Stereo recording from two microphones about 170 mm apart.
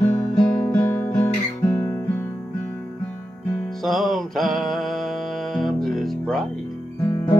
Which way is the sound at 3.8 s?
Centre (ahead or behind).